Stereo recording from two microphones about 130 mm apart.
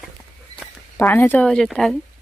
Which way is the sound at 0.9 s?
20° left (ahead or behind).